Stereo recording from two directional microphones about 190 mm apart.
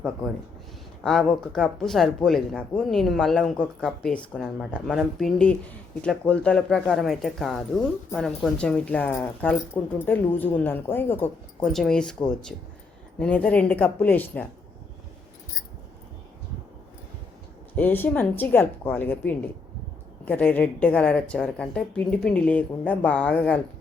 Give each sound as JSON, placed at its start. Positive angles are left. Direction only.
{"t": 1.0, "sound": "a woman's voice", "side_deg": 5}
{"t": 13.1, "sound": "a woman's voice", "side_deg": 5}
{"t": 17.7, "sound": "a woman's voice", "side_deg": 10}